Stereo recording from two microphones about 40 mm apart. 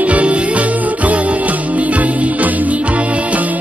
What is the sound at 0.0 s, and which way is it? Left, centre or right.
Music, right.